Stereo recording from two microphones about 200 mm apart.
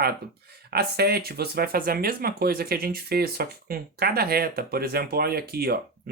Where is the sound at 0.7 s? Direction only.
50° right (ahead or behind).